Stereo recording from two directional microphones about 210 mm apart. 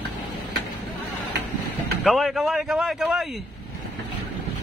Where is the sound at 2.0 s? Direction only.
Centre (ahead or behind).